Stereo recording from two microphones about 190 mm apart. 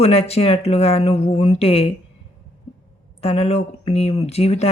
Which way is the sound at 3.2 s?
35° left (ahead or behind).